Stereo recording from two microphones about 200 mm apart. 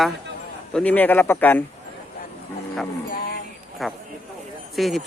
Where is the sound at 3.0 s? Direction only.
45° left (ahead or behind).